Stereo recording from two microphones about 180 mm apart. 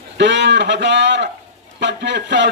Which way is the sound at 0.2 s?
75° right (ahead or behind).